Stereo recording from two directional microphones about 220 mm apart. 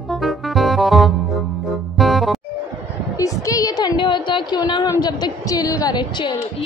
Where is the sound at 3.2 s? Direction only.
15° left (ahead or behind).